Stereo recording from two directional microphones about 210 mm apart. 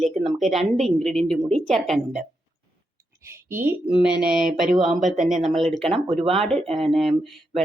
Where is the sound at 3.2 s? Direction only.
10° right (ahead or behind).